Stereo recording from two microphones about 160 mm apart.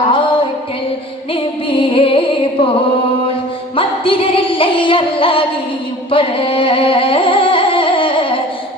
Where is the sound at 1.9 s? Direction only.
35° left (ahead or behind).